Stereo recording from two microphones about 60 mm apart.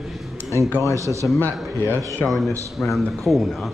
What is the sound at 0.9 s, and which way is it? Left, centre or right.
Speech, right.